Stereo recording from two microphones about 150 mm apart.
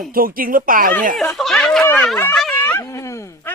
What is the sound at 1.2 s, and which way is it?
Speech, centre (ahead or behind).